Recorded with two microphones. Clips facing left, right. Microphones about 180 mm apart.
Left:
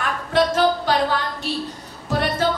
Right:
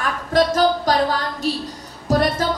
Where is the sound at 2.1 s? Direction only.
40° right (ahead or behind).